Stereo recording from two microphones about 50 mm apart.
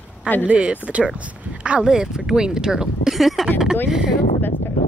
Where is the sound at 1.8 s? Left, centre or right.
Centre.